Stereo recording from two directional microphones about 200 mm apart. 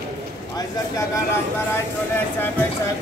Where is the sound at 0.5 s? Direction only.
15° left (ahead or behind).